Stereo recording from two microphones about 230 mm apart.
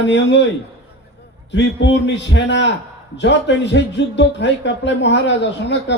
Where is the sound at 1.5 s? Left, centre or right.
Left.